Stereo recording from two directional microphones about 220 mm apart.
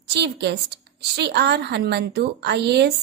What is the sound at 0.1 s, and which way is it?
A woman's voice, 50° right (ahead or behind).